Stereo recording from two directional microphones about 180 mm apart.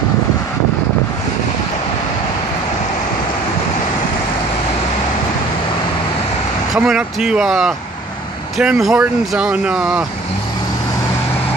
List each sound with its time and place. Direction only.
6.7 s speech: 5° right (ahead or behind)